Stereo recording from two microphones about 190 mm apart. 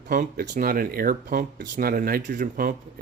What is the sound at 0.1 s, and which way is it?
Speech, 45° right (ahead or behind).